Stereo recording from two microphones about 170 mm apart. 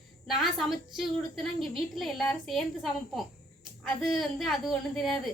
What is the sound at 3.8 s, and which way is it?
A woman's voice, centre (ahead or behind).